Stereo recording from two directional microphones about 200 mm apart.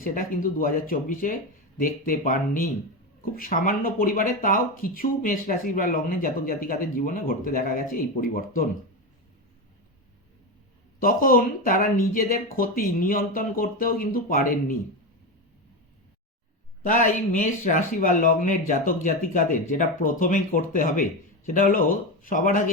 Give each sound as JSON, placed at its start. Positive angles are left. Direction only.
{"t": 0.0, "sound": "speech", "side_deg": 45}
{"t": 11.0, "sound": "speech", "side_deg": 45}
{"t": 16.8, "sound": "speech", "side_deg": 40}